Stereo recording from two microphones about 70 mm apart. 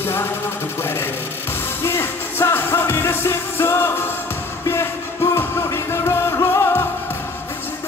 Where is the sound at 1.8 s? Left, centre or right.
Left.